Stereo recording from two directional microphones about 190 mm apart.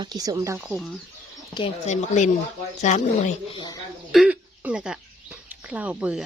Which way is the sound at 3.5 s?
25° left (ahead or behind).